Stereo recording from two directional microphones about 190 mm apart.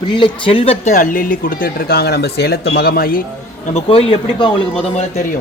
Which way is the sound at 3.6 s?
35° left (ahead or behind).